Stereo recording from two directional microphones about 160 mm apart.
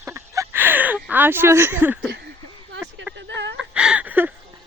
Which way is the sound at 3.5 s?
5° right (ahead or behind).